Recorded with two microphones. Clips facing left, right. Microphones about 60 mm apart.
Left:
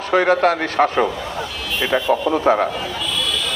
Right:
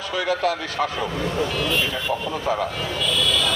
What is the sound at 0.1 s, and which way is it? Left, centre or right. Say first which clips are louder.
Speech: left 8 dB; left.